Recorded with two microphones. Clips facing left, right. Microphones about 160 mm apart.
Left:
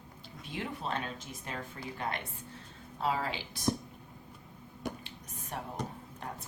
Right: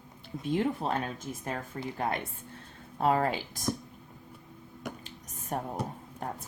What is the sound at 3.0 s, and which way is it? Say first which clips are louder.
Speech: right 7 dB; 50° right (ahead or behind).